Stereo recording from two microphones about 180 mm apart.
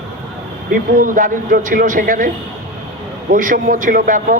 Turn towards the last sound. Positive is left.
turn(degrees=-50)  # may be behind; listen again after turning